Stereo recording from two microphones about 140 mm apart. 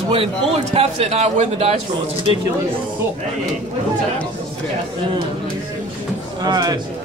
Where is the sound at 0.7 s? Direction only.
45° right (ahead or behind).